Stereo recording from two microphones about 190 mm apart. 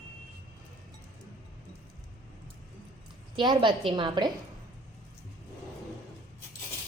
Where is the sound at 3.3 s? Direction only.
25° right (ahead or behind).